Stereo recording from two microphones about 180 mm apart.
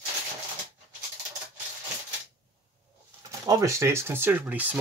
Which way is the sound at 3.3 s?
15° right (ahead or behind).